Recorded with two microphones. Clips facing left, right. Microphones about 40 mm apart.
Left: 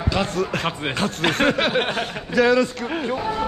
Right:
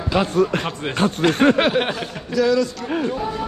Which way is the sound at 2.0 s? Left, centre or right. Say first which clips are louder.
Left 1 dB; left.